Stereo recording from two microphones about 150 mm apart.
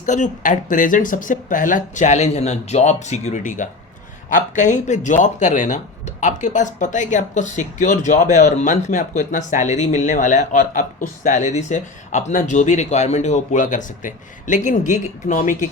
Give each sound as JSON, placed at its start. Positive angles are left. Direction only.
{"t": 0.0, "sound": "speech", "side_deg": 55}